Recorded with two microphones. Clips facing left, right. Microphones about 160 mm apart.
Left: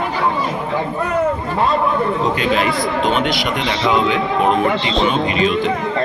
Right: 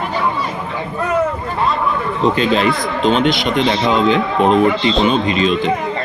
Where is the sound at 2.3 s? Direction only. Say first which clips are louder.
Right 2 dB; 25° right (ahead or behind).